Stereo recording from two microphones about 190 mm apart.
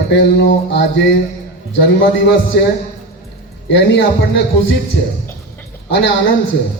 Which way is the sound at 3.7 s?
70° left (ahead or behind).